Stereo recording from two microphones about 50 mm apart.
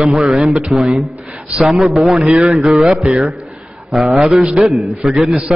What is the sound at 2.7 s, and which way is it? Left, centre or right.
Speech, centre.